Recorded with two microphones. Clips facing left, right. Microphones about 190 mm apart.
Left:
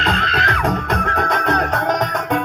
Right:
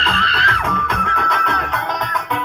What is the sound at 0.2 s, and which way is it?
Music, 35° right (ahead or behind).